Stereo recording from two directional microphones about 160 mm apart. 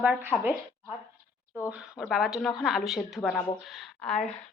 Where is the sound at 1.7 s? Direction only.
Centre (ahead or behind).